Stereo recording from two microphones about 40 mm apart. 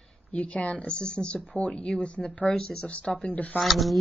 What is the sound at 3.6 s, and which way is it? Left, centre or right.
Speech, centre.